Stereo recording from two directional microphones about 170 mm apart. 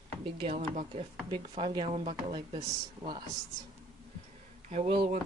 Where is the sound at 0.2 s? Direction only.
30° right (ahead or behind).